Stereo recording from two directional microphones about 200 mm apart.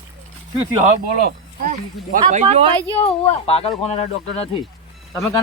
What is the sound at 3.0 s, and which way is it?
Speech, 30° left (ahead or behind).